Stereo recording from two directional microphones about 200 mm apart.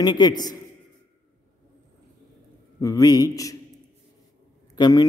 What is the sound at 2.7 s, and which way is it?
Speech, 15° left (ahead or behind).